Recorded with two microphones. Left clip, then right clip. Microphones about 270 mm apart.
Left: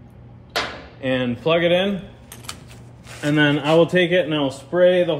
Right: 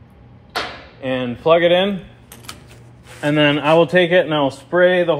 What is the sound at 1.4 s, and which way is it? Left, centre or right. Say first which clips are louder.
Speech: right 5 dB; centre.